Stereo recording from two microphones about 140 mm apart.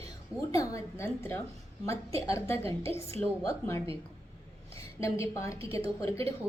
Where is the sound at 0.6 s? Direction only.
25° left (ahead or behind).